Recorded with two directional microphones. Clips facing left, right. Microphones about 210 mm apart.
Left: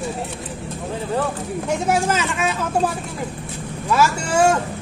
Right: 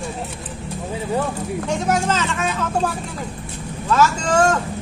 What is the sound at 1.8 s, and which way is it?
Speech, 10° left (ahead or behind).